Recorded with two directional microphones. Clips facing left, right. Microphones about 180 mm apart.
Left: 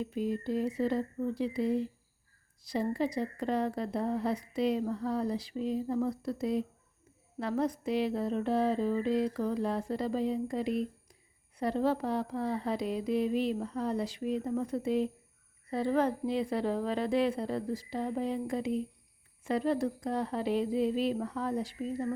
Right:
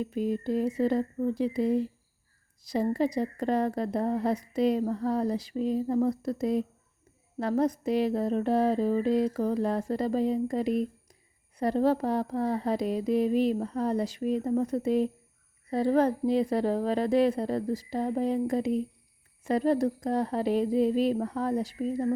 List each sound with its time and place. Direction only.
0.0 s a woman's voice: 45° right (ahead or behind)